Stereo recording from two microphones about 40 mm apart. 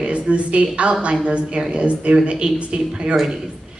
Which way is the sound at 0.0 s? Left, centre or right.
Right.